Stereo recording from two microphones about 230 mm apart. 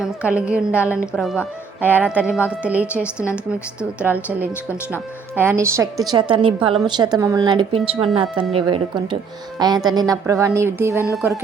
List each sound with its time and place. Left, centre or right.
0.0 s a woman's voice: centre
3.2 s a woman's voice: centre
3.8 s speech: centre